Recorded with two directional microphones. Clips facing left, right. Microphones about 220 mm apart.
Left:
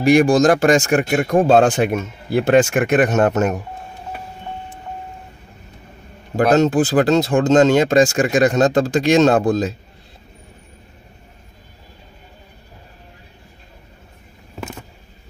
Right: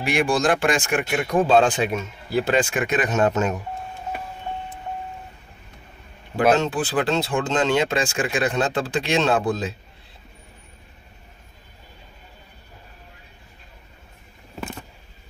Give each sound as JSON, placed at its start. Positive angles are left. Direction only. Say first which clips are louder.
{"t": 0.0, "sound": "speech", "louder": "left 9 dB", "side_deg": 40}
{"t": 6.5, "sound": "speech", "louder": "left 7 dB", "side_deg": 45}